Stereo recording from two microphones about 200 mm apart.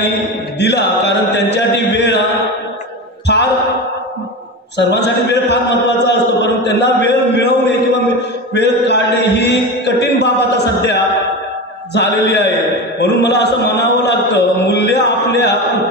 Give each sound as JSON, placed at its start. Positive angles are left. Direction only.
{"t": 0.6, "sound": "mantra", "side_deg": 55}
{"t": 4.7, "sound": "a man's voice", "side_deg": 55}
{"t": 8.5, "sound": "mantra", "side_deg": 55}
{"t": 13.0, "sound": "a sound", "side_deg": 60}